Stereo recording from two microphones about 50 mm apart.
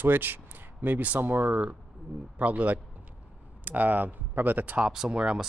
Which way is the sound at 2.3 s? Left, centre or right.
Right.